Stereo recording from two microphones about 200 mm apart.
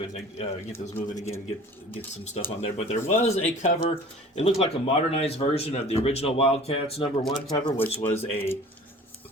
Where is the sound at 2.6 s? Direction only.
30° left (ahead or behind).